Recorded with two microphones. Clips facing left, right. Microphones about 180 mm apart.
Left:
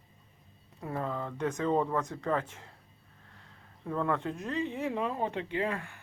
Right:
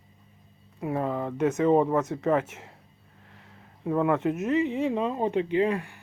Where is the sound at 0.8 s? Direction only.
20° right (ahead or behind).